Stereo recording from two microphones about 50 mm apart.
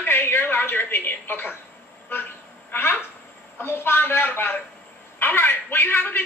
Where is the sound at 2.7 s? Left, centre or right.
Left.